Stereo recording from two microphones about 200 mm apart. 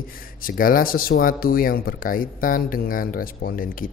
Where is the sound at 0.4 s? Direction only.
45° left (ahead or behind).